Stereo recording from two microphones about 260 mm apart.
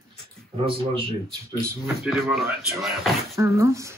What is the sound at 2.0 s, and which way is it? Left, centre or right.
Speech, centre.